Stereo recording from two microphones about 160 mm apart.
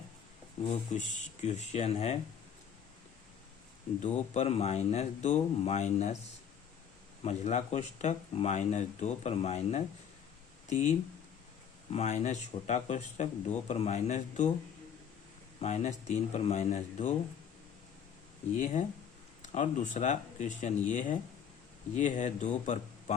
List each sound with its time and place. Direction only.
0.7 s speech: 50° left (ahead or behind)
4.0 s speech: 40° left (ahead or behind)
7.3 s speech: 45° left (ahead or behind)
15.6 s speech: 45° left (ahead or behind)
18.6 s speech: 50° left (ahead or behind)